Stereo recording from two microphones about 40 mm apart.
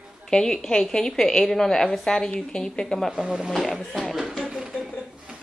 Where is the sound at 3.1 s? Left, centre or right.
Right.